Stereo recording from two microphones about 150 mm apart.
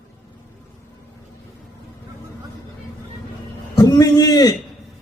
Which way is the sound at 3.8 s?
25° left (ahead or behind).